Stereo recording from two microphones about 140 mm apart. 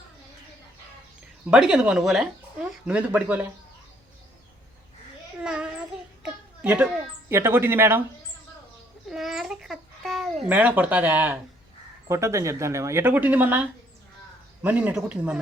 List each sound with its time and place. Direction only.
1.5 s speech: 5° right (ahead or behind)
5.4 s a sound: 5° right (ahead or behind)
6.2 s speech: 10° right (ahead or behind)
9.0 s babbling: centre (ahead or behind)
10.4 s speech: 10° right (ahead or behind)